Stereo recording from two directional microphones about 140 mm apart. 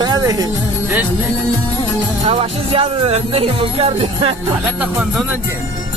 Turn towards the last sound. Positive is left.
turn(degrees=-45)  # may be behind; listen again after turning